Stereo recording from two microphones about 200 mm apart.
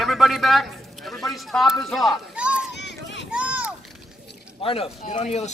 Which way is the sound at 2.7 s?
60° left (ahead or behind).